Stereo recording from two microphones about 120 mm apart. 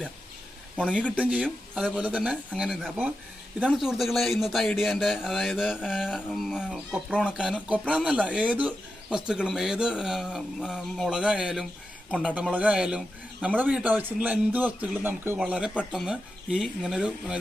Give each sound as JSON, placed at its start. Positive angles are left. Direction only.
{"t": 0.8, "sound": "speech", "side_deg": 10}
{"t": 1.1, "sound": "a man's voice", "side_deg": -10}
{"t": 15.4, "sound": "speech", "side_deg": -5}